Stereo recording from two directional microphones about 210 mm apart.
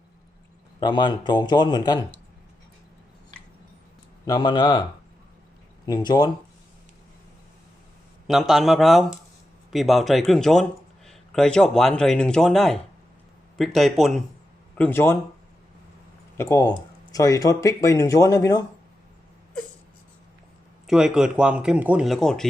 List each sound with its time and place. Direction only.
0.8 s a man's voice: 20° left (ahead or behind)
4.3 s a man's voice: 20° left (ahead or behind)
8.3 s speech: centre (ahead or behind)
14.8 s speech: 10° left (ahead or behind)
16.4 s speech: 15° left (ahead or behind)
20.8 s speech: 5° right (ahead or behind)